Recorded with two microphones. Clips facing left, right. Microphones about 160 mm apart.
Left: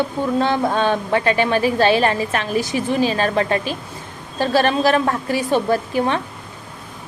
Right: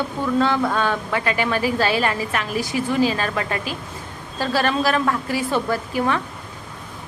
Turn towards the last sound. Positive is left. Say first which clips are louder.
# left 3 dB
turn(degrees=25)  # may be behind; listen again after turning